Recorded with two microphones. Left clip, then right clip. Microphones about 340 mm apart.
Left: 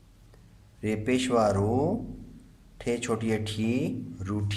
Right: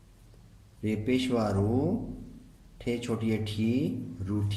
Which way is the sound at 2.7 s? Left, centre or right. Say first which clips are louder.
Left 3 dB; left.